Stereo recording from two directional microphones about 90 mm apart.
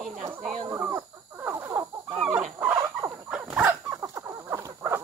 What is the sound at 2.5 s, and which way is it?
Wild animals, 25° right (ahead or behind).